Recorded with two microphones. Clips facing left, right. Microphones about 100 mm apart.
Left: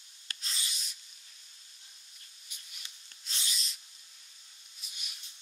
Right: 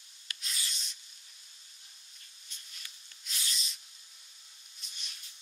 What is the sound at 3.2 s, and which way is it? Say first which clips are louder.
Writing: even; 25° left (ahead or behind).